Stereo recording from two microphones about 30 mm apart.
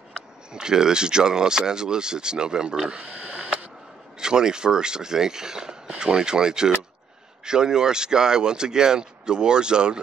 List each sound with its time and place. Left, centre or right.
0.5 s speech: right
3.3 s camera: centre
4.2 s speech: right